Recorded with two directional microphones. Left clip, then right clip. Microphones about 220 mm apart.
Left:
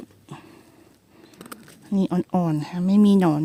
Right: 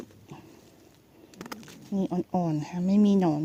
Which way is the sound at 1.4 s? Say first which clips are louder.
Right 1 dB; 10° right (ahead or behind).